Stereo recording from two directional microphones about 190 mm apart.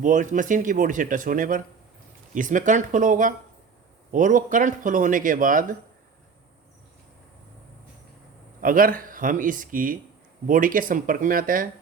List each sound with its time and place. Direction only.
0.0 s speech: 40° right (ahead or behind)
8.6 s speech: 45° right (ahead or behind)